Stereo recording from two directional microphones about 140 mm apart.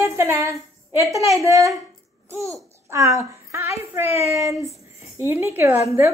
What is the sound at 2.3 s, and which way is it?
A child's voice, 20° right (ahead or behind).